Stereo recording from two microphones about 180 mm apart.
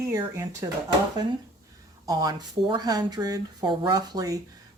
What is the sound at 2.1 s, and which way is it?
Speech, 20° right (ahead or behind).